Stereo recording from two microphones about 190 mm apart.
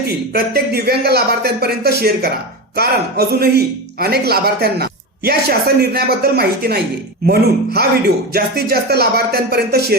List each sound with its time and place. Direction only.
0.3 s a man's voice: 55° right (ahead or behind)